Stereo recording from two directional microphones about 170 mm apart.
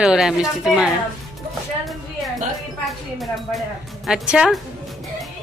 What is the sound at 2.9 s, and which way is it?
Speech, centre (ahead or behind).